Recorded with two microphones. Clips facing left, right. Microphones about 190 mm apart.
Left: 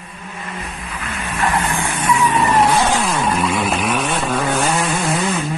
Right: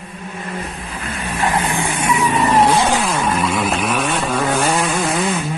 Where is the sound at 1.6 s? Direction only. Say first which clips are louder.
Even; 15° right (ahead or behind).